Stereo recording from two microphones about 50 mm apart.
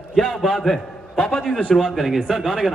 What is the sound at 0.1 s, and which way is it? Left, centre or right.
Speech, centre.